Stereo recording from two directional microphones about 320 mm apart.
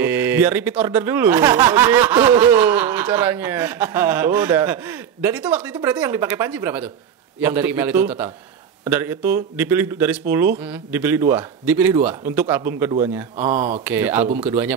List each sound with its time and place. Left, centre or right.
0.0 s speech: centre